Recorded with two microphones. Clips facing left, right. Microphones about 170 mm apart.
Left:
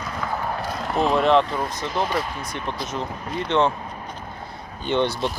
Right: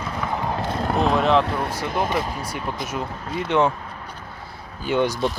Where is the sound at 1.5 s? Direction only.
65° right (ahead or behind).